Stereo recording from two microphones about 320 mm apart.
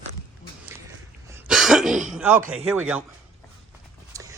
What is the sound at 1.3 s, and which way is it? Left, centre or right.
Throat clearing, centre.